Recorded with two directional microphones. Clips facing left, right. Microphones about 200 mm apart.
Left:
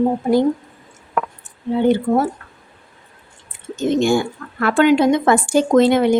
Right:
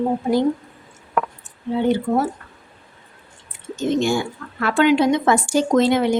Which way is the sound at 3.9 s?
50° left (ahead or behind).